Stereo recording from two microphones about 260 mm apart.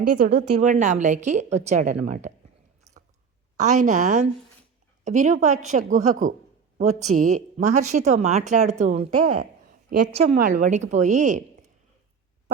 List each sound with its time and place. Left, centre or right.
0.2 s speech: right
0.6 s speech: right
2.9 s biting: centre
3.6 s speech: right
10.2 s speech: right